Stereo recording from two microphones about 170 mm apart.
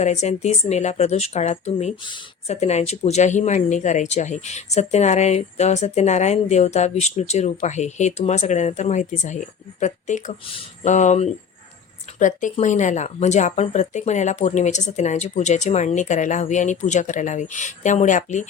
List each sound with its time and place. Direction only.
0.0 s speech: 40° left (ahead or behind)
2.0 s speech: 30° left (ahead or behind)
2.6 s speech: 40° left (ahead or behind)